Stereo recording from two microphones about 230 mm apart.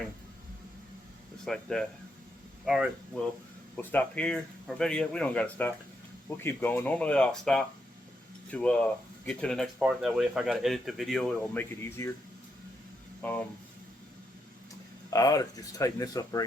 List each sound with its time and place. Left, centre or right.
1.5 s speech: centre
13.2 s speech: centre
15.1 s speech: centre